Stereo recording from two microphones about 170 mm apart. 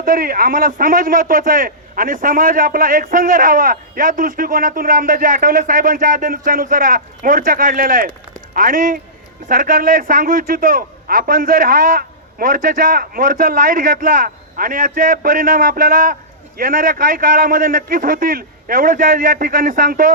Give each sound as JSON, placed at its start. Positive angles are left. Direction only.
{"t": 0.0, "sound": "a man's voice", "side_deg": -55}